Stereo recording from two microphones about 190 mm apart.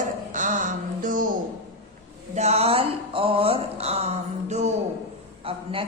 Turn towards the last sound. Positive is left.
turn(degrees=-30)  # may be behind; listen again after turning